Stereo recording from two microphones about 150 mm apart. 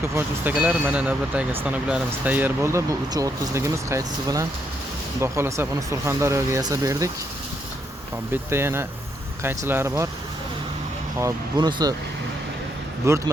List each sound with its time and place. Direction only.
0.1 s speech: 15° right (ahead or behind)
8.3 s speech: 15° right (ahead or behind)
11.2 s speech: 25° right (ahead or behind)
13.1 s speech: 20° right (ahead or behind)